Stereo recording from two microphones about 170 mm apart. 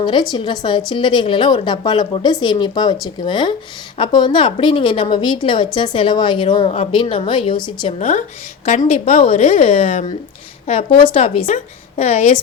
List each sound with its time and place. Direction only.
0.0 s a woman's voice: 25° left (ahead or behind)
7.9 s a woman's voice: 40° left (ahead or behind)